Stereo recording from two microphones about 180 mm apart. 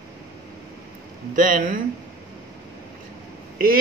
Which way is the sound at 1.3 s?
50° right (ahead or behind).